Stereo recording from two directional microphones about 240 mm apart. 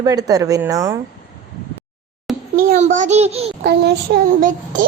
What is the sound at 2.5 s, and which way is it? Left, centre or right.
A child's voice, right.